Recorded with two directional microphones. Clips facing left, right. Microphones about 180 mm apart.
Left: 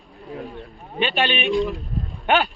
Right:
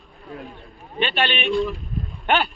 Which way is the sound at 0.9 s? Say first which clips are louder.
Left 1 dB; 15° left (ahead or behind).